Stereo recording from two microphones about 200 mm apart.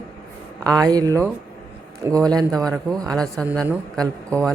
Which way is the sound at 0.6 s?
20° right (ahead or behind).